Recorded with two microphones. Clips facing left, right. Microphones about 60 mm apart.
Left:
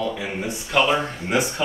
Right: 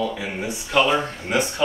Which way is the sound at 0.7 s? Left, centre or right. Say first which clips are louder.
Right 1 dB; centre.